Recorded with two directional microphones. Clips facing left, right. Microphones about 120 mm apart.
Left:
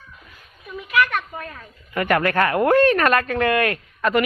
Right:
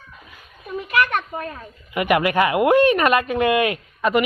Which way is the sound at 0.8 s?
35° right (ahead or behind).